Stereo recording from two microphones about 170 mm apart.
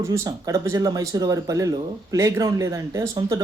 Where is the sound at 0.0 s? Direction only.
20° right (ahead or behind).